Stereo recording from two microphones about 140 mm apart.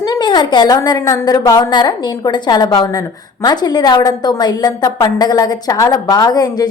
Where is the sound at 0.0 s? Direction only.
30° left (ahead or behind).